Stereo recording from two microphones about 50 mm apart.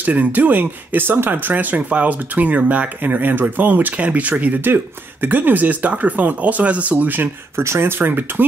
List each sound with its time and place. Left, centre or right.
0.0 s speech: right
7.5 s speech: right
8.0 s speech: right